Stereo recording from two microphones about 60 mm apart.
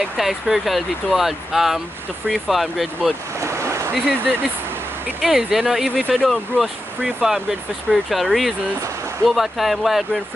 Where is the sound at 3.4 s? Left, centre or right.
Right.